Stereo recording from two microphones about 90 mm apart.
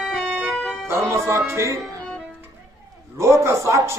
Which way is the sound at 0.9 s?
30° right (ahead or behind).